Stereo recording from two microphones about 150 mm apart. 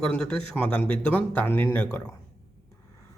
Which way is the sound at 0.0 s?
5° left (ahead or behind).